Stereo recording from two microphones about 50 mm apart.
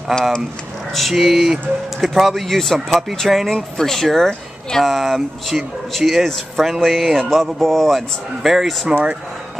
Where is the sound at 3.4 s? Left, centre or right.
Centre.